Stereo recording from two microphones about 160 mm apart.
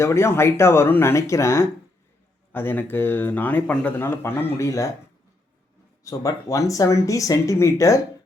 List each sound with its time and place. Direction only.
0.0 s speech: 15° left (ahead or behind)
6.1 s speech: 20° left (ahead or behind)